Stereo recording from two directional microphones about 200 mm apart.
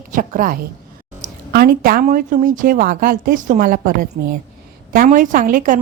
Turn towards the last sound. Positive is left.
turn(degrees=-40)  # may be behind; listen again after turning